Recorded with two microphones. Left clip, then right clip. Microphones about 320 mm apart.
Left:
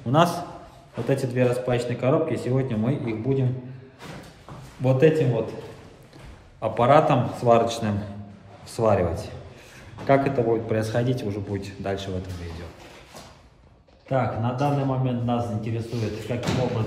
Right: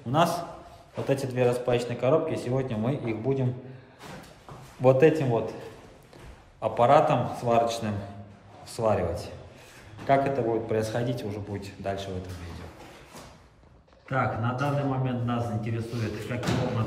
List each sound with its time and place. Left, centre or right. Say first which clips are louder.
0.0 s a man's voice: left 4 dB; centre
4.8 s a man's voice: even; centre
6.6 s a man's voice: left 2 dB; centre
14.0 s a man's voice: left 3 dB; centre